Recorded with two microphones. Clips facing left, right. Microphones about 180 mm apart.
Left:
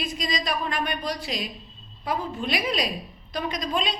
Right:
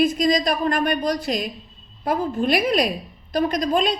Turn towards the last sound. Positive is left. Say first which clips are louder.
# right 7 dB
turn(degrees=-50)  # may be behind; listen again after turning